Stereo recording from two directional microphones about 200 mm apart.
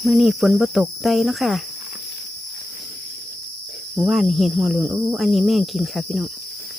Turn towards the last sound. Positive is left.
turn(degrees=0)  # may be behind; listen again after turning